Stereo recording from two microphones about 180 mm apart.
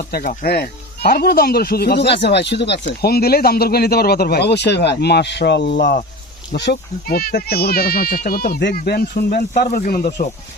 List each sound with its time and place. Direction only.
0.1 s speech: 55° left (ahead or behind)